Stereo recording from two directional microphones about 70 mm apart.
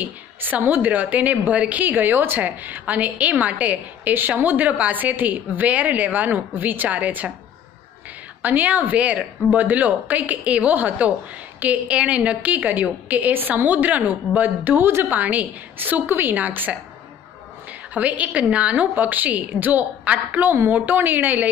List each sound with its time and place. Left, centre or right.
0.0 s a woman's voice: right
8.4 s a woman's voice: right
17.9 s a woman's voice: right